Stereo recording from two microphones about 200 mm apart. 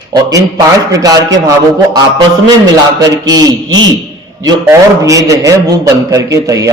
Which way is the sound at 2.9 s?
20° right (ahead or behind).